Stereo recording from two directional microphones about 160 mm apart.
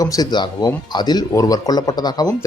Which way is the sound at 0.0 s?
25° left (ahead or behind).